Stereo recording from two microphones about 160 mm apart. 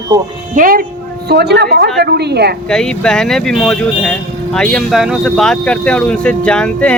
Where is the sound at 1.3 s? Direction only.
90° right.